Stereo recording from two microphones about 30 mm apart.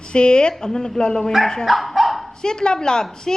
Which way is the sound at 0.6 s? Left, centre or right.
Left.